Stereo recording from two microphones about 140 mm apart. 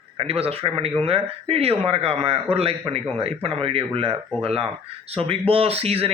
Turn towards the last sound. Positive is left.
turn(degrees=-45)  # may be behind; listen again after turning